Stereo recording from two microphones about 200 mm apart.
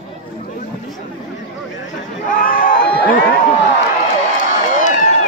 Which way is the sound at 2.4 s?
45° left (ahead or behind).